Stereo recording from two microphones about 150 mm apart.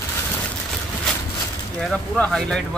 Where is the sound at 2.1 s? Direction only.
Centre (ahead or behind).